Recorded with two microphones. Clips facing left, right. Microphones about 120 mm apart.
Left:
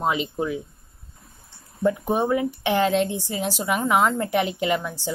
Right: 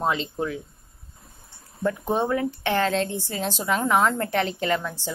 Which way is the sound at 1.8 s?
10° left (ahead or behind).